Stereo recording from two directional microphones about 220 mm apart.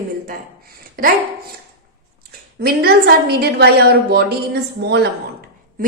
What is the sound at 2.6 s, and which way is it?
A woman's voice, 45° right (ahead or behind).